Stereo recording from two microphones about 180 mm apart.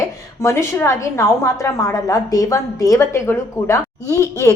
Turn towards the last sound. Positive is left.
turn(degrees=20)  # may be behind; listen again after turning